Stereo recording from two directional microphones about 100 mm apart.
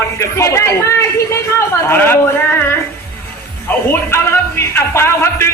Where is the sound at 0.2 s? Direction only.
30° left (ahead or behind).